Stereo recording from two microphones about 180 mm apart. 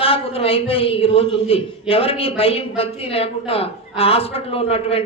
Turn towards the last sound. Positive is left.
turn(degrees=35)  # may be behind; listen again after turning